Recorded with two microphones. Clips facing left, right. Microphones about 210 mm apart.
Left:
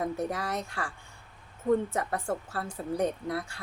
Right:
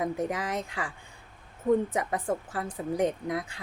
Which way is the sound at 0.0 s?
15° right (ahead or behind).